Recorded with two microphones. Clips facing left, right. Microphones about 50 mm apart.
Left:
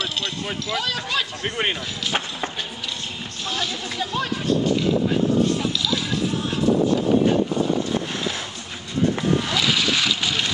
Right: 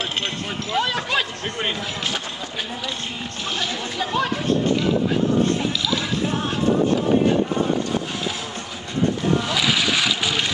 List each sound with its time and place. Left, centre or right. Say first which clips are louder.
0.0 s speech: right 1 dB; right
1.4 s speech: left 2 dB; left
3.4 s speech: even; right
9.5 s boat: right 1 dB; centre